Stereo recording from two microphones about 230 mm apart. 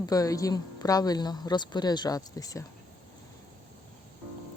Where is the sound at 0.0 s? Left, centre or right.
Centre.